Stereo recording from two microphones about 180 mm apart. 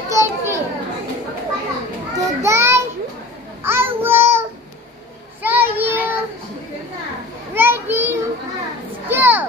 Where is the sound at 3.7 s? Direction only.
10° right (ahead or behind).